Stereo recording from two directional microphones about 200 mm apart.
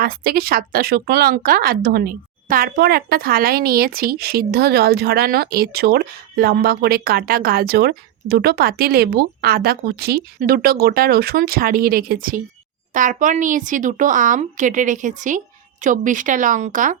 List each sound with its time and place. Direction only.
0.0 s a woman's voice: 45° right (ahead or behind)